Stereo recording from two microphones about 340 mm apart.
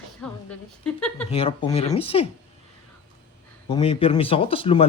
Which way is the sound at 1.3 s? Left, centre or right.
Centre.